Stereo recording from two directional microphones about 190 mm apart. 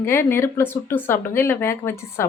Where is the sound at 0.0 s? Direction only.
10° left (ahead or behind).